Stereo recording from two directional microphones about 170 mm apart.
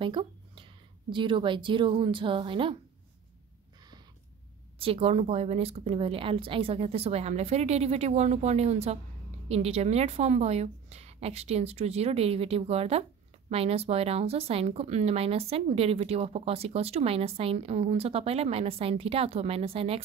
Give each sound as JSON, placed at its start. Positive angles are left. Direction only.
{"t": 0.0, "sound": "a sound", "side_deg": -30}
{"t": 1.1, "sound": "a woman's voice", "side_deg": -30}
{"t": 4.7, "sound": "a woman's voice", "side_deg": -35}